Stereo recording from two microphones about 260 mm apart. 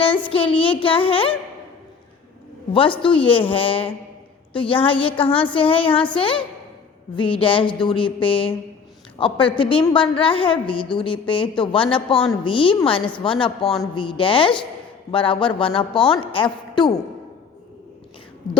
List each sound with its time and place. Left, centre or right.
0.3 s a woman's voice: left
2.7 s a woman's voice: centre
13.6 s speech: centre
13.9 s a woman's voice: centre